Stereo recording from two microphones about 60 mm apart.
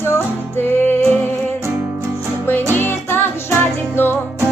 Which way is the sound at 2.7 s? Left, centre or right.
Left.